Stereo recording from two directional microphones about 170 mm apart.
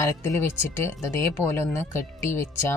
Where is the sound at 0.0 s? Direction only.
15° left (ahead or behind).